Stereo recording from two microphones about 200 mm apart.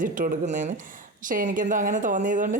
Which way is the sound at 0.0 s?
40° right (ahead or behind).